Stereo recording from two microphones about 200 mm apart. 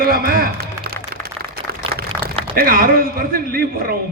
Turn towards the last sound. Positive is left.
turn(degrees=-45)  # may be behind; listen again after turning